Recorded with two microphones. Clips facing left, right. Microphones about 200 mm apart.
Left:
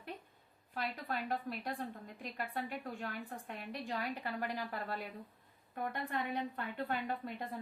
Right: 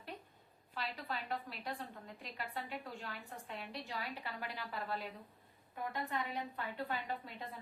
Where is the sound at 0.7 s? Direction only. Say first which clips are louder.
Left 3 dB; 50° left (ahead or behind).